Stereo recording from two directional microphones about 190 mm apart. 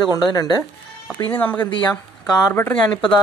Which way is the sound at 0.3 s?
20° left (ahead or behind).